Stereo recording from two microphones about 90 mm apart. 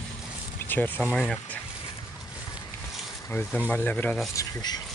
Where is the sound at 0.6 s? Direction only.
20° left (ahead or behind).